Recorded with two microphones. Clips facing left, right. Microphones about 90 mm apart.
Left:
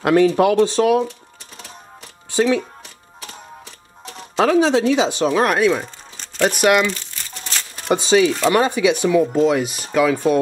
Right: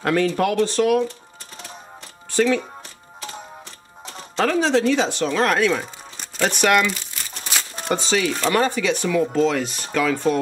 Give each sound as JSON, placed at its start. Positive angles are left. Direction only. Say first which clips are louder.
{"t": 0.0, "sound": "speech", "louder": "left 6 dB", "side_deg": 15}
{"t": 4.0, "sound": "speech", "louder": "left 4 dB", "side_deg": 5}
{"t": 6.1, "sound": "music", "louder": "left 4 dB", "side_deg": -5}
{"t": 6.5, "sound": "speech", "louder": "left 2 dB", "side_deg": 5}
{"t": 6.9, "sound": "crumpling", "louder": "left 2 dB", "side_deg": -10}
{"t": 7.9, "sound": "speech", "louder": "left 6 dB", "side_deg": 15}